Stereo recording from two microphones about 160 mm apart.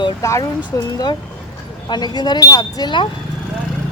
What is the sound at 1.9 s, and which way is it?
Speech, 25° left (ahead or behind).